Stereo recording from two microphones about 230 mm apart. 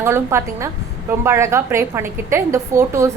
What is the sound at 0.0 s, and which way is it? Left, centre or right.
A woman's voice, centre.